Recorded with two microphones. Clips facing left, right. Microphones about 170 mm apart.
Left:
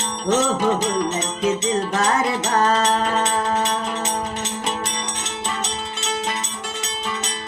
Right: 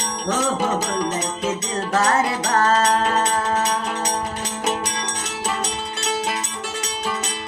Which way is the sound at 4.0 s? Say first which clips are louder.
Even; 25° left (ahead or behind).